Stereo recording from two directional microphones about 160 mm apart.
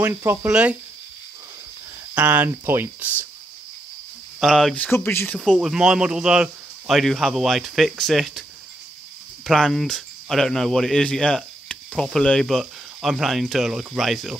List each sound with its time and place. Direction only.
0.0 s speech: 15° right (ahead or behind)
2.1 s speech: 10° right (ahead or behind)
4.4 s speech: centre (ahead or behind)
5.4 s speech: centre (ahead or behind)
9.5 s speech: centre (ahead or behind)